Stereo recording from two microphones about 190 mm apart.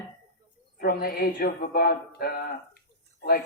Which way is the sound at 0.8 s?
50° left (ahead or behind).